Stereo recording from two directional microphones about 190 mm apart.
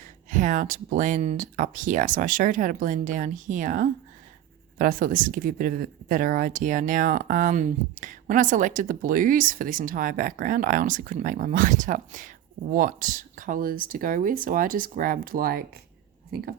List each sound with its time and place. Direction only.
0.3 s a woman's voice: 40° right (ahead or behind)